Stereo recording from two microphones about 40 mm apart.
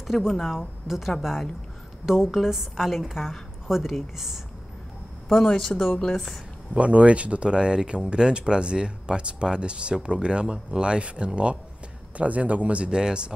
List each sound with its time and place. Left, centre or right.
0.2 s a woman's voice: centre
5.3 s speech: centre
6.7 s speech: right